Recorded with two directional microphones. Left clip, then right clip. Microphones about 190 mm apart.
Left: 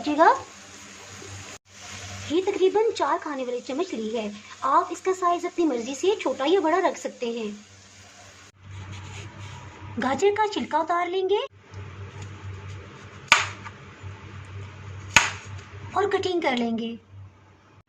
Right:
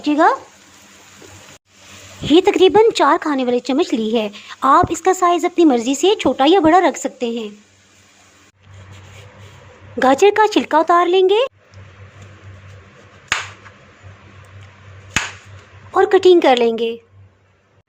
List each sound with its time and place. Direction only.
0.0 s speech: 35° right (ahead or behind)
2.3 s speech: 50° right (ahead or behind)
10.0 s speech: 55° right (ahead or behind)
15.9 s speech: 50° right (ahead or behind)